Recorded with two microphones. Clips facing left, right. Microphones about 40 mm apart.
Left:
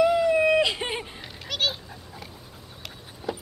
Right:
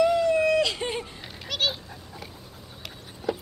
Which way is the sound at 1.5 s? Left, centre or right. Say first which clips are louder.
Even; centre.